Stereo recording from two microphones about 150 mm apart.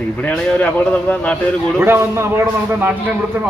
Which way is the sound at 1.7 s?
15° right (ahead or behind).